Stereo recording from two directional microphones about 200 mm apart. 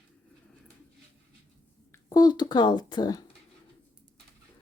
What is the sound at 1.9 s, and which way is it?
Speech, 15° left (ahead or behind).